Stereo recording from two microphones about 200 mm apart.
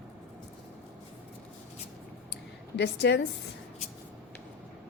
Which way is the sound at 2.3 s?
60° left (ahead or behind).